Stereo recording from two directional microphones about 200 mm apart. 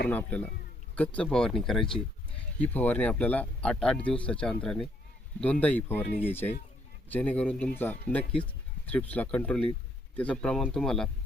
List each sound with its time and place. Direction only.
0.1 s speech: 5° left (ahead or behind)